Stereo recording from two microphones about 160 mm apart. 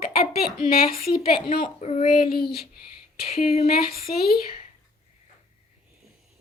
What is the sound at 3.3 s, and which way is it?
Speech, 40° left (ahead or behind).